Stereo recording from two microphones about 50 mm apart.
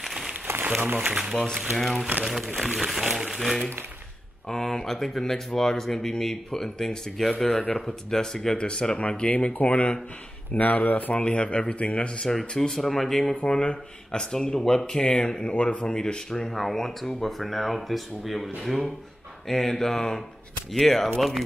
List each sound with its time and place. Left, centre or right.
0.0 s a sound: centre
0.5 s a sound: right
1.6 s speech: centre; by 11.1 s left
11.1 s speech: left
12.3 s speech: centre
13.3 s speech: left